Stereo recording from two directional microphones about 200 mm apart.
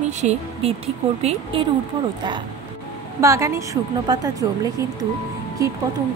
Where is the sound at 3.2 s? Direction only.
15° right (ahead or behind).